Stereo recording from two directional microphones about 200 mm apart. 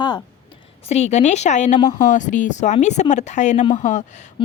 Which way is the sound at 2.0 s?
40° left (ahead or behind).